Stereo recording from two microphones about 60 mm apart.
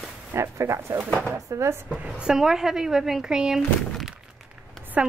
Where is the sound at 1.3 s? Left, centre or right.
Right.